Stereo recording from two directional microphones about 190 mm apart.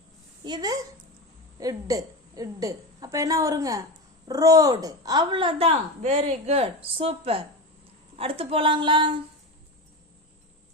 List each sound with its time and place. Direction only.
0.4 s a woman's voice: 20° right (ahead or behind)